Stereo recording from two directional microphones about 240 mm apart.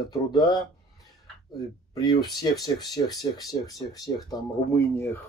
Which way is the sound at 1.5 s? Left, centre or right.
Centre.